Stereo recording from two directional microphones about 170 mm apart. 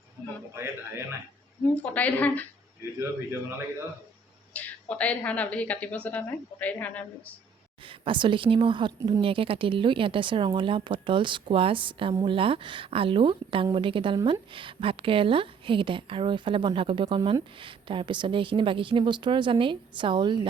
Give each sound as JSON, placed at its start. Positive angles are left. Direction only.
{"t": 0.5, "sound": "a man's voice", "side_deg": -15}
{"t": 1.7, "sound": "a woman's voice", "side_deg": 10}
{"t": 4.5, "sound": "a woman's voice", "side_deg": 10}
{"t": 7.9, "sound": "speech", "side_deg": -30}